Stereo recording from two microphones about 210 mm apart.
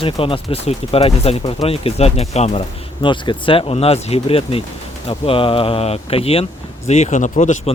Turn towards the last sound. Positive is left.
turn(degrees=35)  # may be behind; listen again after turning